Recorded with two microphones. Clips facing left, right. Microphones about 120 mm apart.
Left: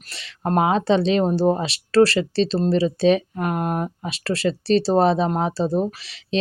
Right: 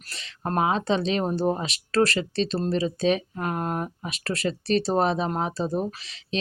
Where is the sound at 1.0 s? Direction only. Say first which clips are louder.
Left 6 dB; 30° left (ahead or behind).